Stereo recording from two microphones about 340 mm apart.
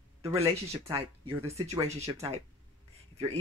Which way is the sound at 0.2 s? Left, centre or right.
Centre.